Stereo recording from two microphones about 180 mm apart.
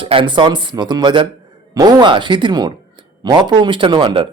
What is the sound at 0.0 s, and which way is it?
A man's voice, 30° right (ahead or behind).